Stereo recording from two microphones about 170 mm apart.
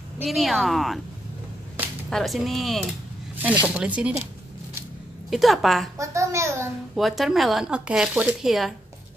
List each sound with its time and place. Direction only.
0.2 s speech: centre (ahead or behind)
2.0 s a child's voice: centre (ahead or behind)
5.3 s speech: centre (ahead or behind)
5.9 s a child's voice: 15° right (ahead or behind)
7.0 s speech: centre (ahead or behind)